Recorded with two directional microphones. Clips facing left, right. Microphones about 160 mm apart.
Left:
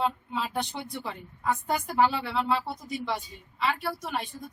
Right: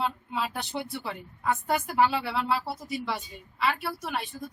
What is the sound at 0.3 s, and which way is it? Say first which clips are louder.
Speech: even; 5° right (ahead or behind).